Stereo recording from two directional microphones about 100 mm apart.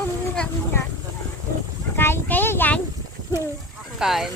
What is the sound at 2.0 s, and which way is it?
Speech, 25° left (ahead or behind).